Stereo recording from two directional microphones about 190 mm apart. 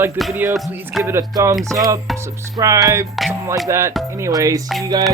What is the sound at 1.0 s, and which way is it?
Speech, 15° right (ahead or behind).